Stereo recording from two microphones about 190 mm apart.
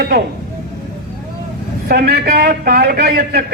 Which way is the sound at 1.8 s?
55° right (ahead or behind).